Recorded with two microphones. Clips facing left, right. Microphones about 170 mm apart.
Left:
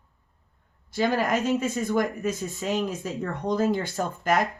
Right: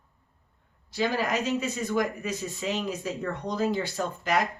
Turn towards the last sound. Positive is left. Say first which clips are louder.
# left 3 dB
turn(degrees=50)  # may be behind; listen again after turning